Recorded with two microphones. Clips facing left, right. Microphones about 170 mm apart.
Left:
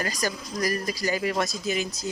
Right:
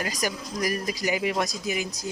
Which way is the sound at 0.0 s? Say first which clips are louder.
Even; 15° right (ahead or behind).